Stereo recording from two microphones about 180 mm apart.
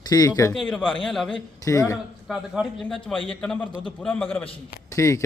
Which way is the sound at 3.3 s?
5° left (ahead or behind).